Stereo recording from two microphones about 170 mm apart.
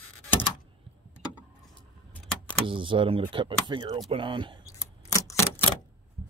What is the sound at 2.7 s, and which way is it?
Speech, 30° right (ahead or behind).